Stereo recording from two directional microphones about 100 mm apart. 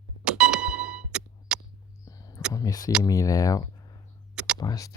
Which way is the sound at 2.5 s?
35° left (ahead or behind).